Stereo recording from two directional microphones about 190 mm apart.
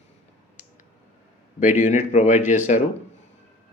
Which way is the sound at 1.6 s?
40° left (ahead or behind).